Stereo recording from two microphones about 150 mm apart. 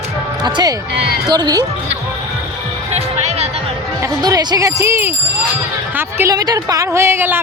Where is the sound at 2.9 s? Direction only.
45° right (ahead or behind).